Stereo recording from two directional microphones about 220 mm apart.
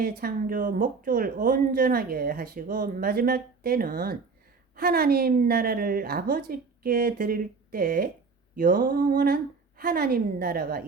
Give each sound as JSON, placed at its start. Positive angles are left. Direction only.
{"t": 0.0, "sound": "speech", "side_deg": -40}